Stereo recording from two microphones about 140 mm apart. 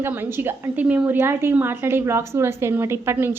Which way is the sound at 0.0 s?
15° right (ahead or behind).